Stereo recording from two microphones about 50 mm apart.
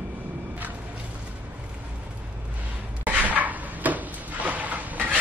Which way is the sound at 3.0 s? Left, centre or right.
Right.